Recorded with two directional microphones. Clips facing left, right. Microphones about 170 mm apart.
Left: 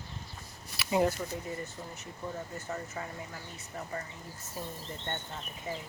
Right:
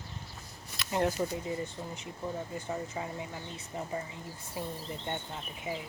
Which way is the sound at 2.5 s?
15° right (ahead or behind).